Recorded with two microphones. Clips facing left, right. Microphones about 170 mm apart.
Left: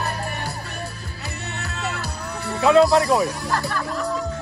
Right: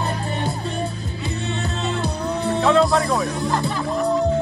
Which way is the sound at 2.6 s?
Centre (ahead or behind).